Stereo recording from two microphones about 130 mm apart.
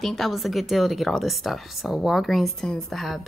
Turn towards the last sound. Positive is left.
turn(degrees=0)  # may be behind; listen again after turning